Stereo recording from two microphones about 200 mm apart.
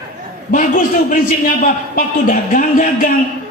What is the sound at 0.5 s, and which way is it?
A man's voice, 45° left (ahead or behind).